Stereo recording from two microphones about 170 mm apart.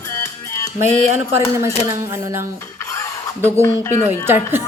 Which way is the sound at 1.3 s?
15° right (ahead or behind).